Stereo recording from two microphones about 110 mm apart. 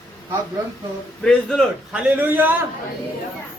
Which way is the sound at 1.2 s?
5° left (ahead or behind).